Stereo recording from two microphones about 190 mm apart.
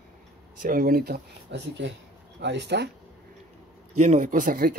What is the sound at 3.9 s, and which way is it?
Speech, 40° right (ahead or behind).